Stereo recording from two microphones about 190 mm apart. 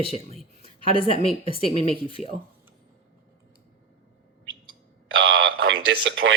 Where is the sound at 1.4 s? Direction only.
30° left (ahead or behind).